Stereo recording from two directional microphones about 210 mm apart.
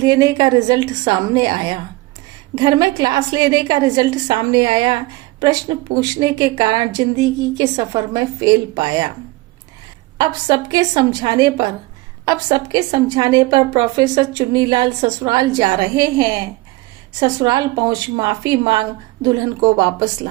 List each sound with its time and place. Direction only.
0.0 s a woman's voice: 20° right (ahead or behind)
10.2 s a woman's voice: 20° right (ahead or behind)